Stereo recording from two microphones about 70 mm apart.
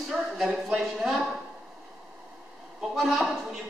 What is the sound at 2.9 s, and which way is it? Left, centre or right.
Speech, centre.